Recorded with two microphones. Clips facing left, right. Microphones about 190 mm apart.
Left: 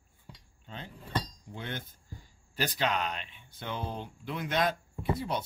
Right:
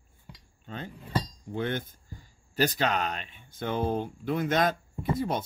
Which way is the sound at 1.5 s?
55° right (ahead or behind).